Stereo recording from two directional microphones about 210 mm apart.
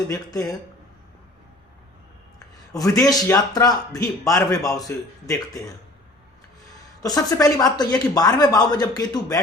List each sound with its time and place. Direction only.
0.1 s speech: 15° left (ahead or behind)
2.7 s speech: 15° left (ahead or behind)
7.0 s speech: 15° left (ahead or behind)